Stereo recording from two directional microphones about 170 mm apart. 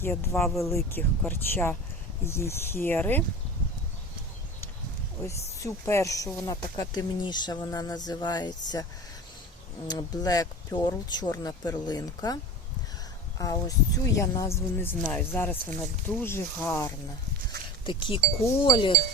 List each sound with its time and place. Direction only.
0.0 s speech: 15° left (ahead or behind)
5.2 s speech: 15° left (ahead or behind)
13.4 s speech: 20° left (ahead or behind)
17.8 s speech: 30° left (ahead or behind)